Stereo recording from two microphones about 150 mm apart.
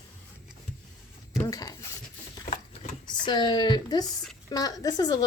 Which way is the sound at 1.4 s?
25° left (ahead or behind).